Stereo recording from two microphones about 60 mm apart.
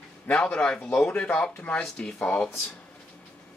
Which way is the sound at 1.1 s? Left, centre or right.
Left.